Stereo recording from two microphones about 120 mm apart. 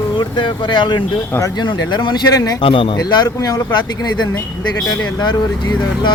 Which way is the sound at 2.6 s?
50° left (ahead or behind).